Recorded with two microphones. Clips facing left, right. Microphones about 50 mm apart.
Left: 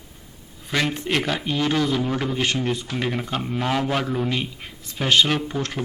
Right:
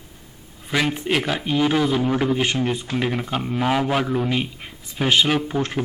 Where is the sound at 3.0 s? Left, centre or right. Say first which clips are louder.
Right 2 dB; centre.